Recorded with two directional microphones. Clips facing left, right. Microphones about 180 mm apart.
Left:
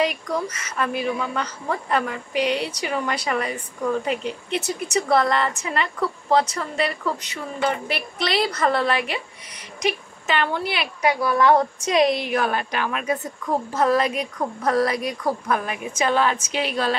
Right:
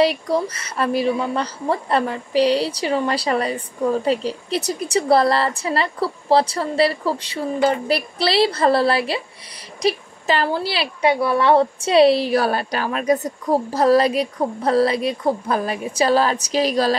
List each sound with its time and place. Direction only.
0.0 s a woman's voice: 35° right (ahead or behind)